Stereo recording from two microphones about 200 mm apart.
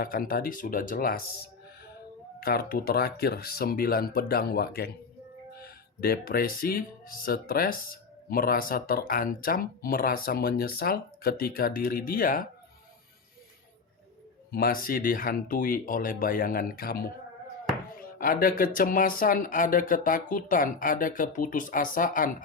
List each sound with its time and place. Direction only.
0.0 s speech: 45° left (ahead or behind)
2.4 s speech: 50° left (ahead or behind)
14.5 s speech: 45° left (ahead or behind)